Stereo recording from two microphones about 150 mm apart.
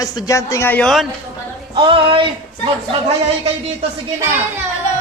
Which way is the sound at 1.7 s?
35° right (ahead or behind).